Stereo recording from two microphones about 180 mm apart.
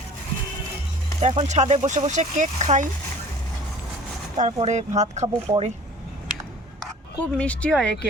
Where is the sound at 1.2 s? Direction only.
35° right (ahead or behind).